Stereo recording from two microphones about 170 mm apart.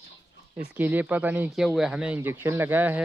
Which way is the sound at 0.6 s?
10° right (ahead or behind).